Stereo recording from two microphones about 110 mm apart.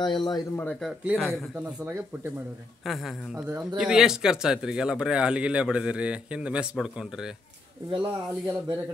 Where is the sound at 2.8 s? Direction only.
Centre (ahead or behind).